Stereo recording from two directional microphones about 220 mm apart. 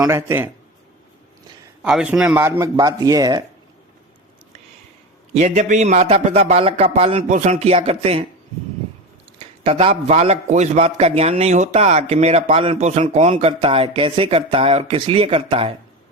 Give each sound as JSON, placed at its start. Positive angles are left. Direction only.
{"t": 0.0, "sound": "a man's voice", "side_deg": -10}
{"t": 1.8, "sound": "a man's voice", "side_deg": -5}
{"t": 5.3, "sound": "a man's voice", "side_deg": -30}
{"t": 9.4, "sound": "a man's voice", "side_deg": -30}